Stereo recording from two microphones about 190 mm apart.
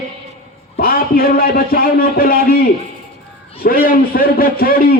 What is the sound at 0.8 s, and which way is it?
A man's voice, 50° left (ahead or behind).